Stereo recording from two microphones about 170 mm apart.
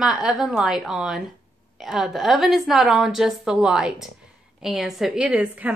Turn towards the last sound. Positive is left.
turn(degrees=-10)  # may be behind; listen again after turning